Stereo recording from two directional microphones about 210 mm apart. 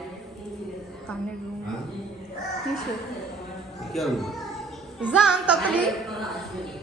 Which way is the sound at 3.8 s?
Centre (ahead or behind).